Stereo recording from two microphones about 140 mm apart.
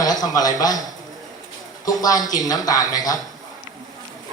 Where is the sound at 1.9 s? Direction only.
25° left (ahead or behind).